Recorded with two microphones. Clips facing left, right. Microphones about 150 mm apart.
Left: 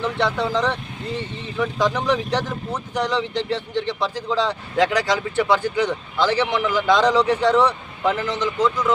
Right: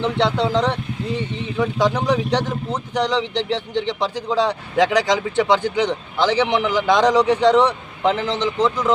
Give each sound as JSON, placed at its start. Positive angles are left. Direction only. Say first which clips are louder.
{"t": 0.0, "sound": "speech", "louder": "right 3 dB", "side_deg": -20}